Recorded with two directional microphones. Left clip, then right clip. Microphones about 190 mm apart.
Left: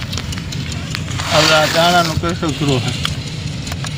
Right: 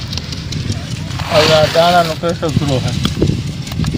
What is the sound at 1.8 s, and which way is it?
Speech, 55° right (ahead or behind).